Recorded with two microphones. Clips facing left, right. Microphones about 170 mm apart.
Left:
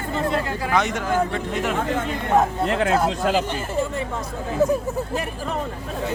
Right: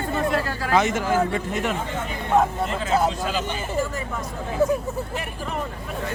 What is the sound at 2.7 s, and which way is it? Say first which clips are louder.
Speech: left 6 dB; 70° left (ahead or behind).